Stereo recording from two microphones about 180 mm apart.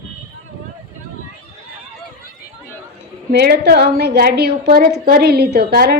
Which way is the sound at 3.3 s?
65° right (ahead or behind).